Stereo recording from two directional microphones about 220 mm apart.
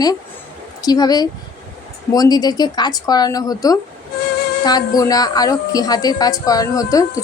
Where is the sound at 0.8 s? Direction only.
15° left (ahead or behind).